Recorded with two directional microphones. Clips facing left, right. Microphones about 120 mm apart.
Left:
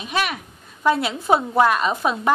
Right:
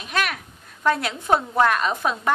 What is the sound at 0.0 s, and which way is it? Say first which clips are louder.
A woman's voice: left 2 dB; 5° left (ahead or behind).